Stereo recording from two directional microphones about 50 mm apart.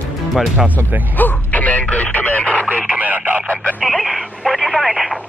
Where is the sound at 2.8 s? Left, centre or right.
Right.